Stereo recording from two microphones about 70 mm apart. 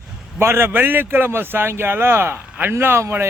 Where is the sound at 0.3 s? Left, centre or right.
Right.